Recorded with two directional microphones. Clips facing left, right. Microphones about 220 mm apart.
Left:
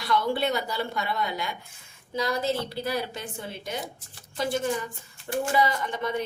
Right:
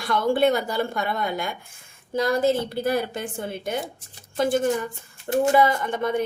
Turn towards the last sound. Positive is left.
turn(degrees=-50)  # may be behind; listen again after turning